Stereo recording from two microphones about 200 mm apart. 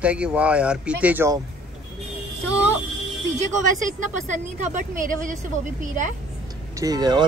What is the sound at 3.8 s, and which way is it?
Speech, 35° right (ahead or behind).